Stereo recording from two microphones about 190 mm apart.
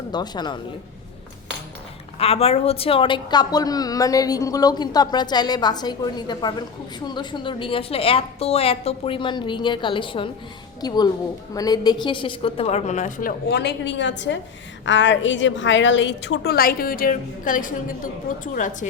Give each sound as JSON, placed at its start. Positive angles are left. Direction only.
{"t": 0.1, "sound": "a woman's voice", "side_deg": 20}
{"t": 2.1, "sound": "a woman's voice", "side_deg": 30}
{"t": 13.5, "sound": "a woman's voice", "side_deg": 60}